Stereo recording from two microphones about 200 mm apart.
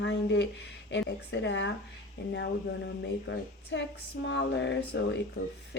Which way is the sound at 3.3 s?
65° left (ahead or behind).